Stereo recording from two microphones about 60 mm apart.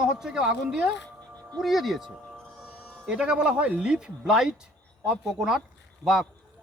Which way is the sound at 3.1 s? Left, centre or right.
Centre.